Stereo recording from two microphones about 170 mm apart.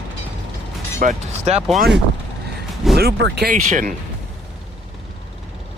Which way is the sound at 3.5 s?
50° right (ahead or behind).